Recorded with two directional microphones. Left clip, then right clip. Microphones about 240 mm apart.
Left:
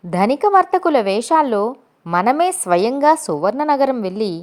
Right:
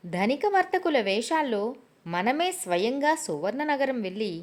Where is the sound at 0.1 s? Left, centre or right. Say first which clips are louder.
Left 11 dB; centre.